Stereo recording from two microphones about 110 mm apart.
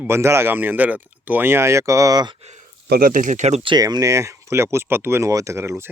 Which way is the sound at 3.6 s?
40° right (ahead or behind).